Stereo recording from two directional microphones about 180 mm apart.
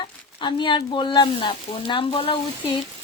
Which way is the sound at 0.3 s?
25° left (ahead or behind).